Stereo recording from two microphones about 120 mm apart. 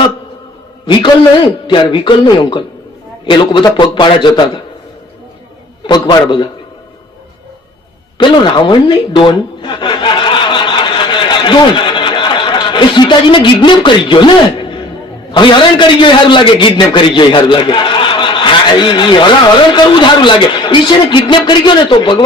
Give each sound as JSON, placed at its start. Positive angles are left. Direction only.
{"t": 1.6, "sound": "a man's voice", "side_deg": 40}
{"t": 5.8, "sound": "a man's voice", "side_deg": 40}
{"t": 8.2, "sound": "a man's voice", "side_deg": 40}